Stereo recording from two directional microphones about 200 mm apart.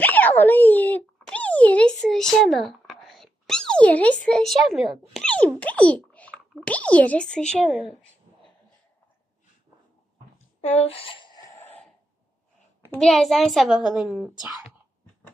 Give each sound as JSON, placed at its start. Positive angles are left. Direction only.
{"t": 0.0, "sound": "a child's voice", "side_deg": 10}
{"t": 10.7, "sound": "speech", "side_deg": 30}
{"t": 11.6, "sound": "a sound", "side_deg": 10}
{"t": 12.9, "sound": "a child's voice", "side_deg": 0}